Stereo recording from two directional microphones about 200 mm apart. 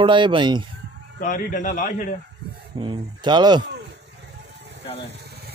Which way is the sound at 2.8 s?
25° right (ahead or behind).